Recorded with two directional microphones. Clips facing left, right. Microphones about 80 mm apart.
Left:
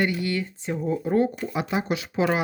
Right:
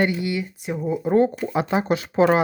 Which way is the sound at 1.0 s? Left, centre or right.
Right.